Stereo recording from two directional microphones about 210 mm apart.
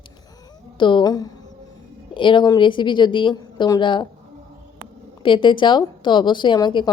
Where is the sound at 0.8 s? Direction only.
25° left (ahead or behind).